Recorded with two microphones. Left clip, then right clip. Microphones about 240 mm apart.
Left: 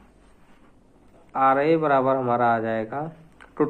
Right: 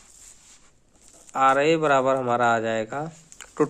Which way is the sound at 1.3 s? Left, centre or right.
Right.